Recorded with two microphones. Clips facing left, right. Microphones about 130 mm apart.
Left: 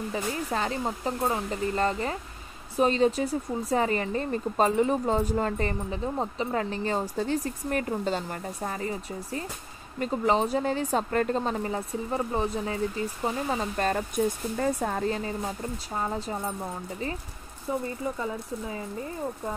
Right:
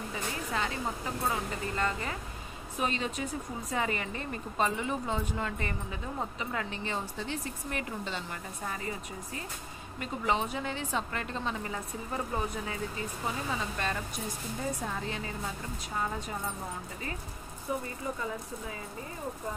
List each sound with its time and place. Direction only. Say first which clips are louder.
0.1 s speech: left 5 dB; 35° left (ahead or behind)